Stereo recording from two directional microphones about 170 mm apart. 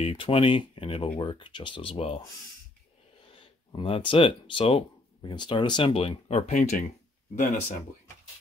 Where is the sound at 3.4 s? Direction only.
30° left (ahead or behind); by 6.8 s 50° left (ahead or behind).